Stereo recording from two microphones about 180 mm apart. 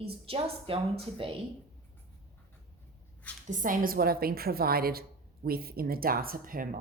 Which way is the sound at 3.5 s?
45° right (ahead or behind).